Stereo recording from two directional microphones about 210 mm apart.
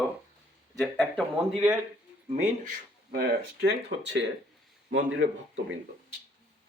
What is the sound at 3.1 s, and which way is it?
Speech, 50° right (ahead or behind).